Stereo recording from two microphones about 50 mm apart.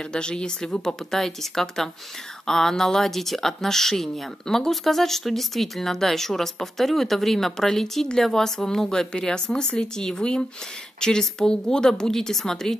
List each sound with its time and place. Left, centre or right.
0.1 s speech: centre